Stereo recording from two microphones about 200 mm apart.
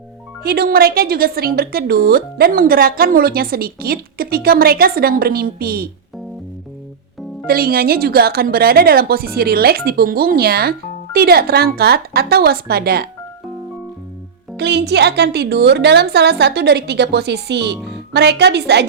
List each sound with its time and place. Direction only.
0.4 s a woman's voice: 50° right (ahead or behind)
7.4 s a woman's voice: 50° right (ahead or behind)
14.5 s a woman's voice: 55° right (ahead or behind)